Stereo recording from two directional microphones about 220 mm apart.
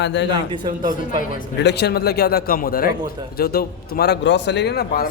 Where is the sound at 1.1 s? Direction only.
45° left (ahead or behind).